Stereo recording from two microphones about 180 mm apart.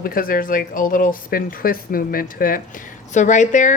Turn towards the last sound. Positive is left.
turn(degrees=45)  # may be behind; listen again after turning